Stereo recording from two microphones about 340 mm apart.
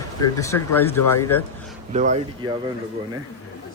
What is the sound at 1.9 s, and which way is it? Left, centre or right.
Speech, centre.